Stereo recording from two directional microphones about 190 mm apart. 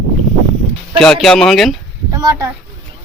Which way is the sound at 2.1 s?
15° right (ahead or behind).